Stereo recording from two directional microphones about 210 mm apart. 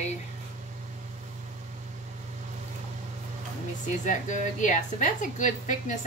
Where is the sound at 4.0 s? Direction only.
35° left (ahead or behind).